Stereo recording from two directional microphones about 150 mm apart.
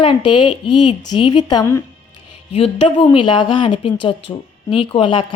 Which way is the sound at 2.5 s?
35° left (ahead or behind).